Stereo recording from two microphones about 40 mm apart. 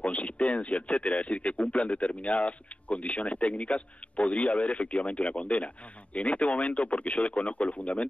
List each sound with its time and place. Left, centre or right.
0.0 s a man's voice: left